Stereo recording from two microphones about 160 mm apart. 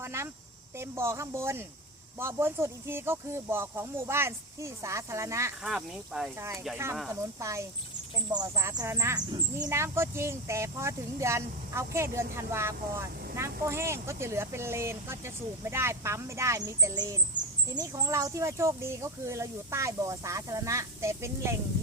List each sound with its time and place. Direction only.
0.0 s cricket: 15° right (ahead or behind)
0.8 s speech: 15° right (ahead or behind)
5.6 s speech: 5° right (ahead or behind)
7.1 s speech: 20° right (ahead or behind)